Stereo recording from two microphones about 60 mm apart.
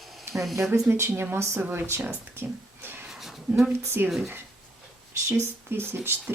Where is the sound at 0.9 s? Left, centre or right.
Right.